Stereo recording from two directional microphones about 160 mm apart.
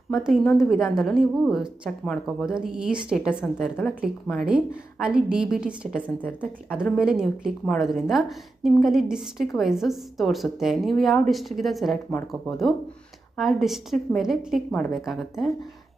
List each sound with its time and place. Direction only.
0.1 s a woman's voice: 5° right (ahead or behind)